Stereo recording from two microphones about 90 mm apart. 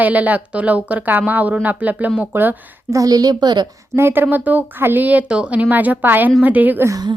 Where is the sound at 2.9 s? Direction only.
40° right (ahead or behind).